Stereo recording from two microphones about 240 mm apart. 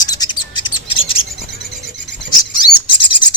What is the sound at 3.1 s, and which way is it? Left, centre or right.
Rub, centre.